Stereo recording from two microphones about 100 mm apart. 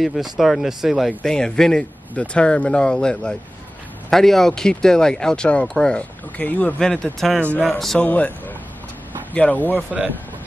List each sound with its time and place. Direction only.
0.0 s speech: centre (ahead or behind)
8.0 s speech: 15° left (ahead or behind)
9.8 s speech: 10° right (ahead or behind)